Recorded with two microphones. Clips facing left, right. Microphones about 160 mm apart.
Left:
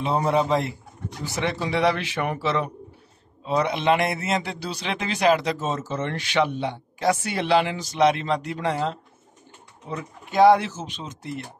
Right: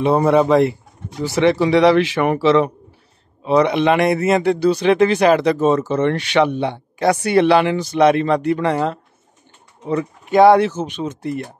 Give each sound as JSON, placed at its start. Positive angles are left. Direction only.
{"t": 0.0, "sound": "a man's voice", "side_deg": -60}
{"t": 1.2, "sound": "speech", "side_deg": -90}
{"t": 3.4, "sound": "a man's voice", "side_deg": -70}